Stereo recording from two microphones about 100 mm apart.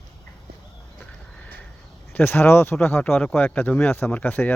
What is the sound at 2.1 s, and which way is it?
Speech, 20° left (ahead or behind).